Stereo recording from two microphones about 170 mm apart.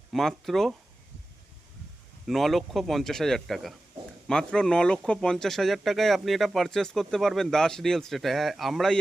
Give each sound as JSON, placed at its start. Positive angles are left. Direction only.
{"t": 0.1, "sound": "speech", "side_deg": 0}
{"t": 2.2, "sound": "speech", "side_deg": 0}